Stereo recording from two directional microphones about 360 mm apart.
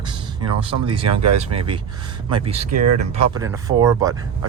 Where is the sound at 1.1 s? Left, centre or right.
Right.